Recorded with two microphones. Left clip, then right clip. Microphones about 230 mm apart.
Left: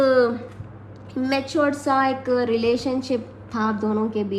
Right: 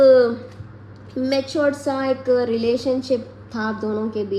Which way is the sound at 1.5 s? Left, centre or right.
Left.